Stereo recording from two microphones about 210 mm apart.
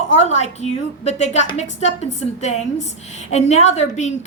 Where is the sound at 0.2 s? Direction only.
35° left (ahead or behind).